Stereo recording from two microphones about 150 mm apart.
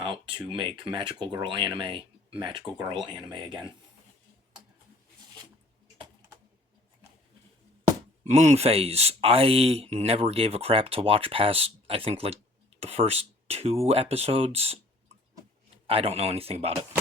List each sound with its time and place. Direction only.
0.3 s speech: 35° right (ahead or behind)
8.2 s speech: 50° right (ahead or behind)
15.9 s speech: 40° right (ahead or behind)